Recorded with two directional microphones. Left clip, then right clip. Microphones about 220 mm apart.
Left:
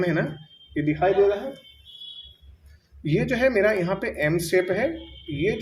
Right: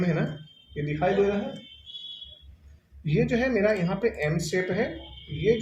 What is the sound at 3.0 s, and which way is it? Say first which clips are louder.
Speech: left 4 dB; 45° left (ahead or behind).